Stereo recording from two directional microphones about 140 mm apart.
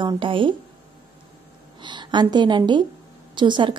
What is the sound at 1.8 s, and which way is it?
A woman's voice, 35° right (ahead or behind).